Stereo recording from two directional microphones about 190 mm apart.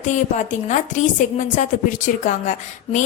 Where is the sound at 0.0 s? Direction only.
40° left (ahead or behind).